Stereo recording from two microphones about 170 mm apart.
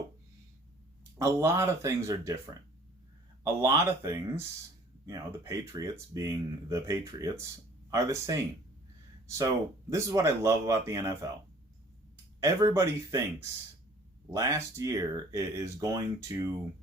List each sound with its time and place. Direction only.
1.2 s speech: 15° right (ahead or behind)
3.4 s speech: 15° right (ahead or behind)
9.9 s speech: 15° right (ahead or behind)
12.4 s speech: 20° right (ahead or behind)
14.3 s speech: 20° right (ahead or behind)